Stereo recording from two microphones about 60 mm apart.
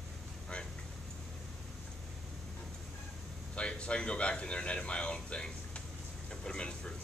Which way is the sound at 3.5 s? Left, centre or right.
Centre.